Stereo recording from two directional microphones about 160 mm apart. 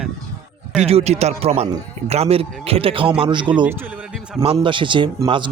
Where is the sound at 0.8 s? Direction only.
40° right (ahead or behind).